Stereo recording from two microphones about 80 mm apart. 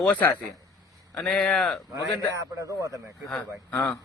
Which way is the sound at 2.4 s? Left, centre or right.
Right.